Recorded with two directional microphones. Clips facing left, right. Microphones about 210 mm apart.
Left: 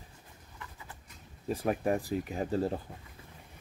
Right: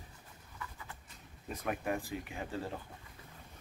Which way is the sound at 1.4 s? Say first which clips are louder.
Left 7 dB; 35° left (ahead or behind).